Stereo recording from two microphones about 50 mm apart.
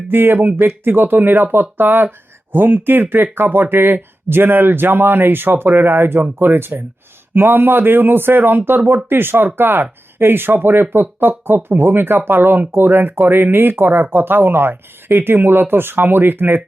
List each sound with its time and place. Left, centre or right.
0.1 s speech: right